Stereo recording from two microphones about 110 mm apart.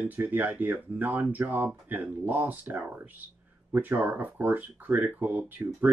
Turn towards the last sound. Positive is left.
turn(degrees=-15)  # may be behind; listen again after turning